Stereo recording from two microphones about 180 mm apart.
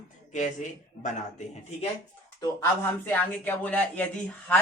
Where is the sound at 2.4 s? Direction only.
15° left (ahead or behind).